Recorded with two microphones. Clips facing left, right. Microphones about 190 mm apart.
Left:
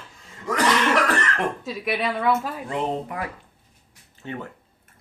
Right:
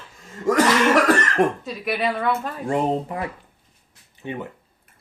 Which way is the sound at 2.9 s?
25° right (ahead or behind).